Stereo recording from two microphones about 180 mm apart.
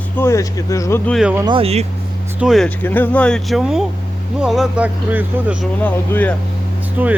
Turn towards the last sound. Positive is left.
turn(degrees=-10)  # may be behind; listen again after turning